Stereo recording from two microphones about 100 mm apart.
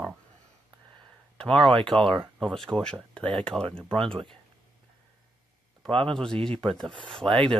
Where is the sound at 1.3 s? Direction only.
5° left (ahead or behind).